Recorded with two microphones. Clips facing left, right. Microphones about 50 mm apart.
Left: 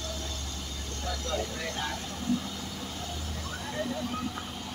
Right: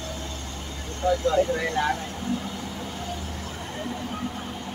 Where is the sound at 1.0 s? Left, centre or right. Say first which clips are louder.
Right 14 dB; right.